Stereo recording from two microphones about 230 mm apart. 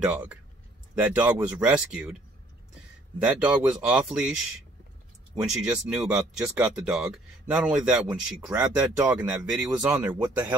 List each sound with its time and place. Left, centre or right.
0.0 s speech: centre
3.2 s speech: centre